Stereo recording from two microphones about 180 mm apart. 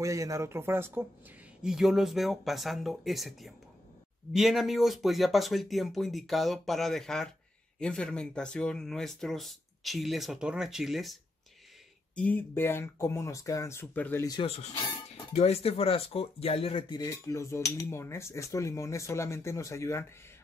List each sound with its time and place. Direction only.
0.0 s speech: 15° right (ahead or behind)
1.6 s speech: centre (ahead or behind)
12.2 s speech: 10° left (ahead or behind)
14.2 s speech: 25° left (ahead or behind)